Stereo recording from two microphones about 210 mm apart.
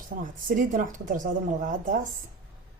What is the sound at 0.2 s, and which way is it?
A woman's voice, 40° right (ahead or behind).